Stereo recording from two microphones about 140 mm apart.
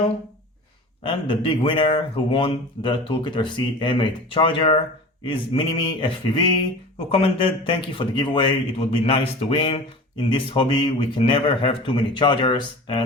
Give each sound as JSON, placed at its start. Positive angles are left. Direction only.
{"t": 1.0, "sound": "a man's voice", "side_deg": 35}